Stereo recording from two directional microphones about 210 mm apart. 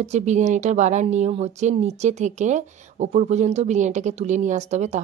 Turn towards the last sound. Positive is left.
turn(degrees=-35)  # may be behind; listen again after turning